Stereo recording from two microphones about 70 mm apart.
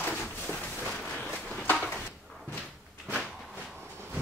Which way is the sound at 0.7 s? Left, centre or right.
Left.